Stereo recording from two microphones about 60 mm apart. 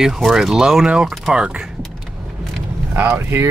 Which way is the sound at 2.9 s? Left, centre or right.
Right.